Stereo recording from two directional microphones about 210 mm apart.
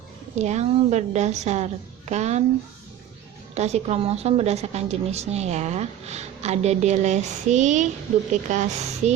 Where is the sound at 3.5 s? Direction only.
30° right (ahead or behind).